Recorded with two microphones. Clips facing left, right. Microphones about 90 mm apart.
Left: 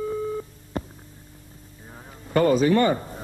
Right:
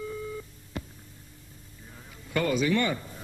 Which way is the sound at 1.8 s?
40° left (ahead or behind).